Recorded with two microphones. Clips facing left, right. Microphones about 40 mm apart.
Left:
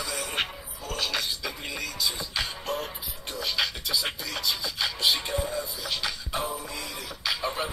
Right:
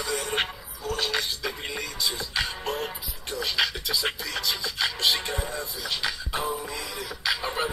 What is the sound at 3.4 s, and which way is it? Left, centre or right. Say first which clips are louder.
Music: right 2 dB; centre.